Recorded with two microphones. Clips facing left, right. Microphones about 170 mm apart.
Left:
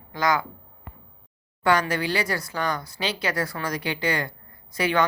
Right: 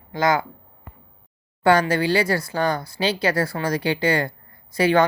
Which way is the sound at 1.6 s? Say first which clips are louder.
Right 5 dB; 30° right (ahead or behind).